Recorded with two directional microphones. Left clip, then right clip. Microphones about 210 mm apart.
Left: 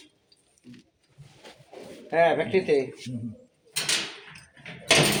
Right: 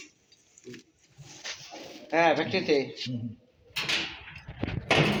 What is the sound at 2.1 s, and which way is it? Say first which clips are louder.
Speech: left 2 dB; 25° left (ahead or behind).